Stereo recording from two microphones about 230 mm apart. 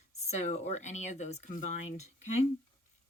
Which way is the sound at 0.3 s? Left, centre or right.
Left.